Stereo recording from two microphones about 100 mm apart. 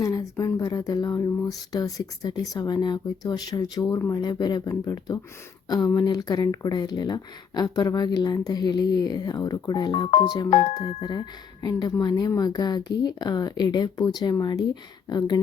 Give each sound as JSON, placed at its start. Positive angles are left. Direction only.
{"t": 0.0, "sound": "a woman's voice", "side_deg": 35}